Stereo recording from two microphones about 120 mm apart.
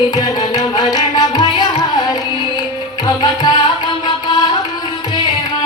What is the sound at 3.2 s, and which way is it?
Music, 35° left (ahead or behind).